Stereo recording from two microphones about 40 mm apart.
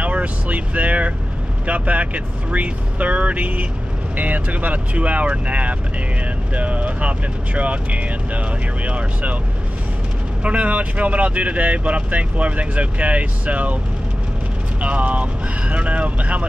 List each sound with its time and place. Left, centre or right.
0.0 s vehicle: right
1.7 s speech: right
10.4 s speech: right
14.8 s speech: right